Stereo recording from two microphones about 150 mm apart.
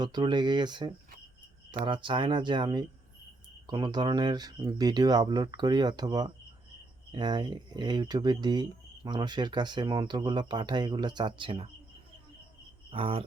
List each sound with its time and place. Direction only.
0.0 s speech: 30° right (ahead or behind)
12.9 s speech: 40° right (ahead or behind)